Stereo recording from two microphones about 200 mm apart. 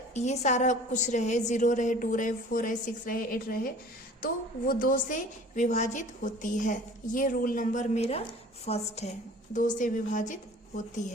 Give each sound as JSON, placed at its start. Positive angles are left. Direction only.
{"t": 0.1, "sound": "a woman's voice", "side_deg": 35}